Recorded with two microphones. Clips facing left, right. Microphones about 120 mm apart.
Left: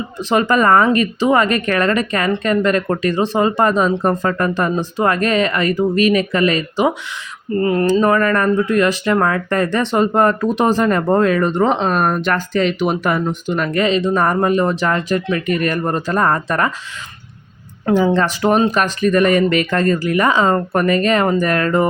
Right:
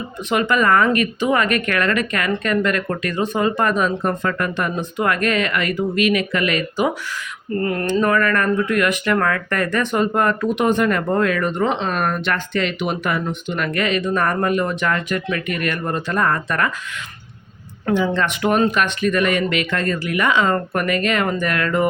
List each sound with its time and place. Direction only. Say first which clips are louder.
0.2 s speech: left 4 dB; 35° left (ahead or behind)
17.9 s speech: left 5 dB; 40° left (ahead or behind)